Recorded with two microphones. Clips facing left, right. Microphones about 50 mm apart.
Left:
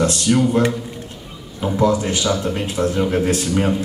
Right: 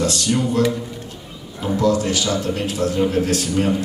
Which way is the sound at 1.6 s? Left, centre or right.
Centre.